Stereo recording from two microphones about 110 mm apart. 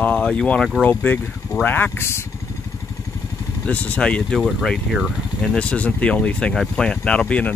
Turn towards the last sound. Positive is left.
turn(degrees=10)  # may be behind; listen again after turning